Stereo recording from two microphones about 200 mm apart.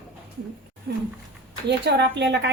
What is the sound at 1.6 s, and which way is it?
Speech, 60° right (ahead or behind).